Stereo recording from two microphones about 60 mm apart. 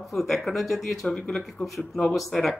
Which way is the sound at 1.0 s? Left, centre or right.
Centre.